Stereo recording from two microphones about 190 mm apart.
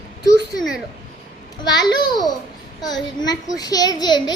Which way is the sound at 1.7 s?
20° left (ahead or behind).